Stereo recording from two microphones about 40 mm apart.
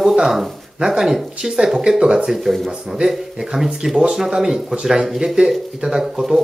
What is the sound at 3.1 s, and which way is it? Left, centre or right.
Speech, centre.